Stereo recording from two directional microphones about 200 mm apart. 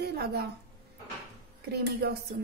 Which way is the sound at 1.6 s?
50° right (ahead or behind).